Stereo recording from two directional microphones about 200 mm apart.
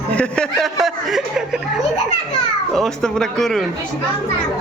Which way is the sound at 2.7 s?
Centre (ahead or behind).